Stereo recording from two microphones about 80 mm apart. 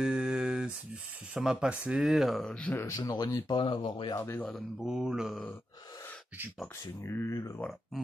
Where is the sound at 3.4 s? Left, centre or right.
Left.